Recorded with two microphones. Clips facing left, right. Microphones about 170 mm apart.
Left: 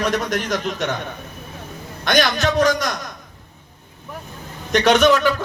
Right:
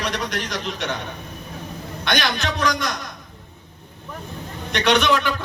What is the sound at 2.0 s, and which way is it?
Speech, 45° left (ahead or behind).